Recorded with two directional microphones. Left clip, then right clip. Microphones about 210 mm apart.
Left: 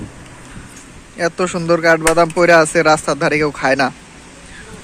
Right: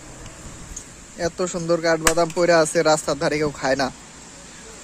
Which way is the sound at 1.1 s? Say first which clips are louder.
Left 7 dB; 5° right (ahead or behind).